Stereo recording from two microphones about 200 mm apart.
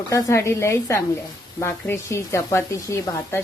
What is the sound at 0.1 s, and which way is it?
Speech, 15° left (ahead or behind).